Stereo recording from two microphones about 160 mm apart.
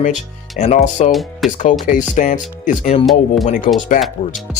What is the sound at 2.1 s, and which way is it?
Speech, 50° left (ahead or behind).